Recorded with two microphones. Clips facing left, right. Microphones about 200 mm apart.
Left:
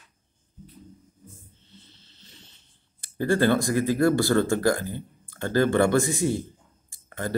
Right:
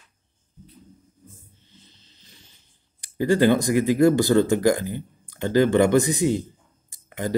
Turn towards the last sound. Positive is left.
turn(degrees=-15)  # may be behind; listen again after turning